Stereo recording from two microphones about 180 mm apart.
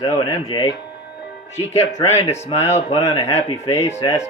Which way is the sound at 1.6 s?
35° left (ahead or behind).